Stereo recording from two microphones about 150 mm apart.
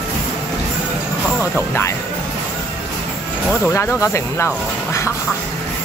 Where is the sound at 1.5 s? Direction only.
15° left (ahead or behind).